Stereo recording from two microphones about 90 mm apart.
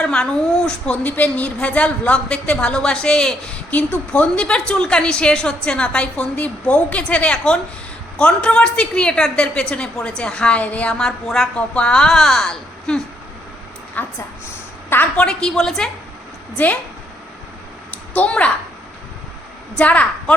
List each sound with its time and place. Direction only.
0.0 s a woman's voice: 10° left (ahead or behind)
14.0 s a woman's voice: 20° left (ahead or behind)
15.1 s a woman's voice: 10° left (ahead or behind)
18.1 s a woman's voice: 15° left (ahead or behind)
19.7 s a woman's voice: 15° left (ahead or behind)